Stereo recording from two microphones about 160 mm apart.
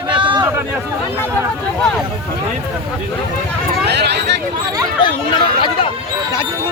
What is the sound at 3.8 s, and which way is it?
Speech, 90° right.